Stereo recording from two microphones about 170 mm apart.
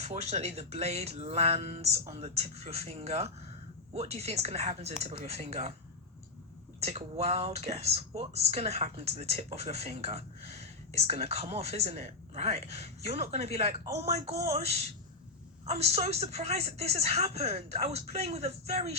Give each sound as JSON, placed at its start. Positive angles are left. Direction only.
{"t": 0.0, "sound": "speech", "side_deg": -40}
{"t": 6.7, "sound": "speech", "side_deg": -40}